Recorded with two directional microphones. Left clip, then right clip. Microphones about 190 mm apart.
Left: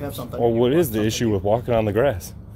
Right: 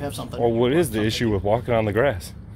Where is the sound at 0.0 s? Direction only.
15° right (ahead or behind).